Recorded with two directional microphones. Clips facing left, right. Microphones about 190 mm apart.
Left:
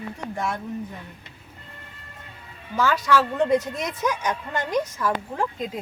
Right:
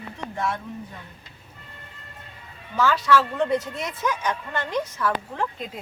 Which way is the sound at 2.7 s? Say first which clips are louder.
Even; 15° left (ahead or behind).